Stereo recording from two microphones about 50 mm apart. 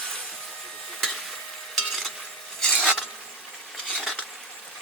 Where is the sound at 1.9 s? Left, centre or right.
Centre.